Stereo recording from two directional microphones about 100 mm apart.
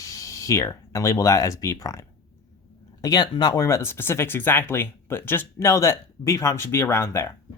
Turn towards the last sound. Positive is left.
turn(degrees=25)  # may be behind; listen again after turning